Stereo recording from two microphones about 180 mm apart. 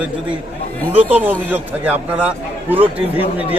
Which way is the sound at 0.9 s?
10° right (ahead or behind).